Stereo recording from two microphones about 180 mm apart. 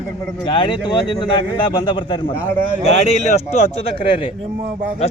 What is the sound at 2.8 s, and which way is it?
Speech, 40° left (ahead or behind).